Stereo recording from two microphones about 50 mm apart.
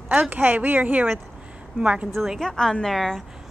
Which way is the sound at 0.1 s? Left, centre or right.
Right.